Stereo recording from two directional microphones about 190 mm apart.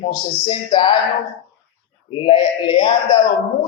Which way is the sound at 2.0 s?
25° left (ahead or behind).